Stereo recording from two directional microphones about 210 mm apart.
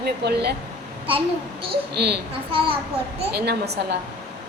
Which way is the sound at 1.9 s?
50° right (ahead or behind).